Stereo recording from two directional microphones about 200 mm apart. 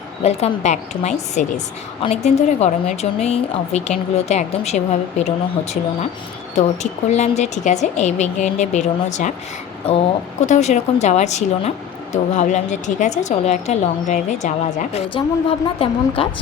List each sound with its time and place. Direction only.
0.2 s a woman's voice: 30° left (ahead or behind)
7.1 s a woman's voice: 35° left (ahead or behind)